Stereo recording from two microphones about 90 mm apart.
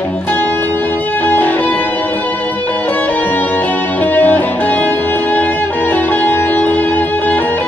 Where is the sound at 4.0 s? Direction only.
20° left (ahead or behind).